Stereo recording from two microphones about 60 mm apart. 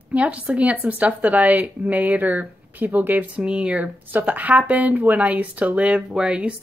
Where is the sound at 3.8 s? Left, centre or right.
Right.